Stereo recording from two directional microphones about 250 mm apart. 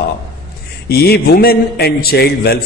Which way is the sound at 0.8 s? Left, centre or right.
Left.